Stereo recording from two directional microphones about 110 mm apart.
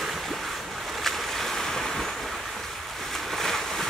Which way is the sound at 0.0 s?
Centre (ahead or behind).